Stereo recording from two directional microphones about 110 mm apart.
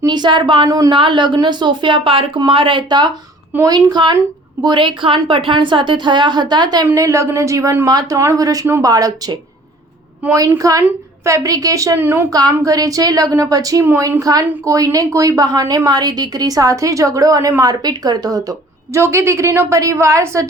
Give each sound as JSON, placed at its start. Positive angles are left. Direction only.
{"t": 0.0, "sound": "speech", "side_deg": -40}
{"t": 3.5, "sound": "speech", "side_deg": -20}
{"t": 3.8, "sound": "a woman's voice", "side_deg": -40}
{"t": 6.9, "sound": "a woman's voice", "side_deg": -30}
{"t": 10.6, "sound": "a woman's voice", "side_deg": -30}
{"t": 11.9, "sound": "speech", "side_deg": -20}
{"t": 12.3, "sound": "a woman's voice", "side_deg": -35}
{"t": 13.8, "sound": "a woman's voice", "side_deg": -20}
{"t": 18.9, "sound": "speech", "side_deg": -25}